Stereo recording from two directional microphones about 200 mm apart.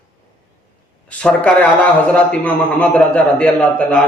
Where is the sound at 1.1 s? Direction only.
5° left (ahead or behind).